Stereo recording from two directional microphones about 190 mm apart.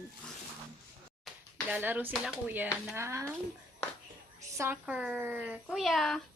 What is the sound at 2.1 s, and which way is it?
Speech, 5° right (ahead or behind).